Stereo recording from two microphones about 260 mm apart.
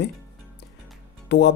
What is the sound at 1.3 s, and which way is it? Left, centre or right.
Speech, left.